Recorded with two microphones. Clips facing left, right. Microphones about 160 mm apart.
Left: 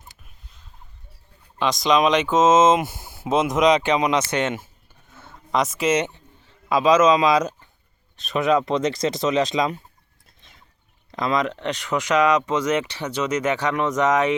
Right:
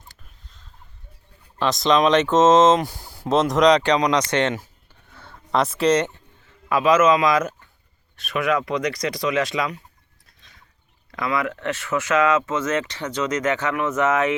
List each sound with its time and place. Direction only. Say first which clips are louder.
1.5 s speech: right 1 dB; centre (ahead or behind)
5.1 s a sound: even; 20° left (ahead or behind)
5.6 s speech: right 5 dB; 5° left (ahead or behind); by 9.8 s 25° left (ahead or behind)
11.1 s speech: left 2 dB; 20° left (ahead or behind)